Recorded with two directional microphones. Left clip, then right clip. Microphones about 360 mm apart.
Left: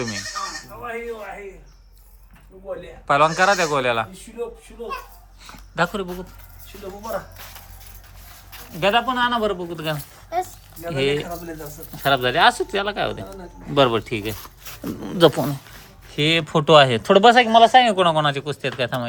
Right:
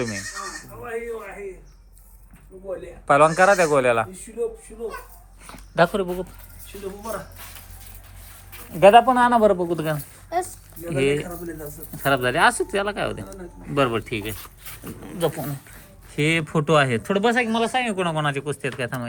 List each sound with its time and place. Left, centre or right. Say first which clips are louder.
3.1 s speech: right 1 dB; centre
5.5 s speech: right 3 dB; centre
8.7 s speech: right 7 dB; centre
10.2 s speech: left 1 dB; centre
10.8 s speech: even; centre
15.0 s speech: left 9 dB; left
16.0 s speech: left 3 dB; centre